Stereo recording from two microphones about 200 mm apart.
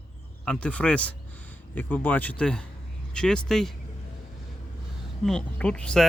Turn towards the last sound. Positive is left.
turn(degrees=5)  # may be behind; listen again after turning